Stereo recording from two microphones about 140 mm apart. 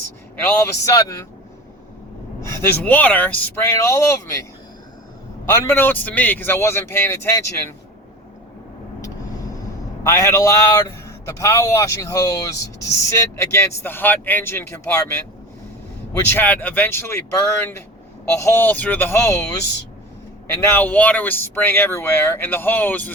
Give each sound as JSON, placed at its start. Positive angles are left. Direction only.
{"t": 0.6, "sound": "a man's voice", "side_deg": 25}
{"t": 2.4, "sound": "speech", "side_deg": 20}
{"t": 5.5, "sound": "speech", "side_deg": 20}
{"t": 10.0, "sound": "a man's voice", "side_deg": 20}
{"t": 16.2, "sound": "speech", "side_deg": 15}
{"t": 20.6, "sound": "speech", "side_deg": 15}